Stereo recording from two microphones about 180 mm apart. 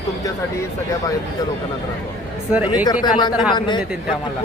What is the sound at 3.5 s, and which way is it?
Speech, 25° left (ahead or behind).